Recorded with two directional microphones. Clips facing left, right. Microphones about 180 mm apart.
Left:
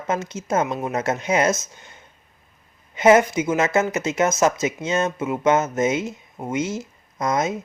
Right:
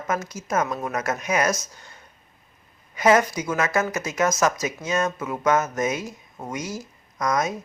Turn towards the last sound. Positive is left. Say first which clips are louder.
# left 2 dB
turn(degrees=25)  # may be behind; listen again after turning